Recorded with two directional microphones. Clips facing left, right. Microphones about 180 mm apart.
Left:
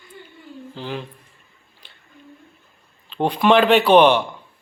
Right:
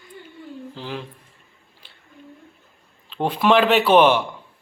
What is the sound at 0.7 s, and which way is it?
Speech, centre (ahead or behind).